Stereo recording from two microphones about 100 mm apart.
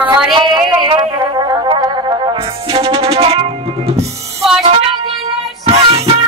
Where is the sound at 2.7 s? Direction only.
65° right (ahead or behind).